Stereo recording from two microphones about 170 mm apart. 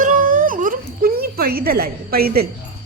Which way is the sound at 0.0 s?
50° right (ahead or behind).